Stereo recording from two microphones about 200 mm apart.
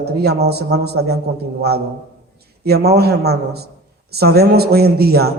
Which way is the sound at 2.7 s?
55° right (ahead or behind).